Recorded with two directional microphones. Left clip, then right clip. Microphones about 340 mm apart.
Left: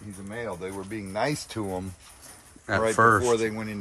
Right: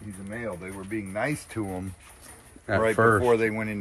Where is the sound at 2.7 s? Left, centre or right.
Centre.